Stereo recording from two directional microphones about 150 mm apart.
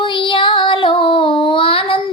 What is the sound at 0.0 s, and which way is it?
Child singing, 35° left (ahead or behind).